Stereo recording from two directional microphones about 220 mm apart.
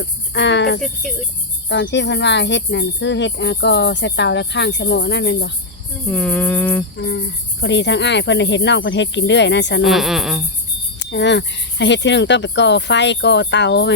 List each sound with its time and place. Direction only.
0.3 s speech: 55° left (ahead or behind)
6.1 s cricket: 5° left (ahead or behind)
7.0 s speech: 55° left (ahead or behind)
9.8 s speech: centre (ahead or behind)
11.0 s speech: 55° left (ahead or behind)